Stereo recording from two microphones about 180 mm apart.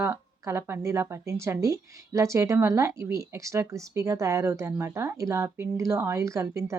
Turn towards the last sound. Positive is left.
turn(degrees=-15)  # may be behind; listen again after turning